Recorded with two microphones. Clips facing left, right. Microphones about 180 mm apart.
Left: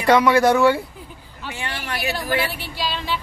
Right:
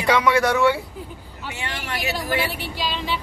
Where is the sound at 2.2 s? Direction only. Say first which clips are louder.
Even; 15° right (ahead or behind).